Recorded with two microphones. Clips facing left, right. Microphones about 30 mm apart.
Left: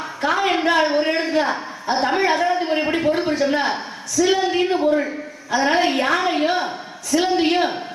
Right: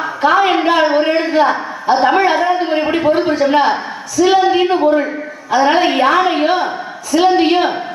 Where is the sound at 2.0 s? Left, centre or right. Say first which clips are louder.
Right 5 dB; centre.